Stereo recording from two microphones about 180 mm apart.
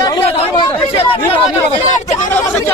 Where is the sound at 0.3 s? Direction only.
30° left (ahead or behind).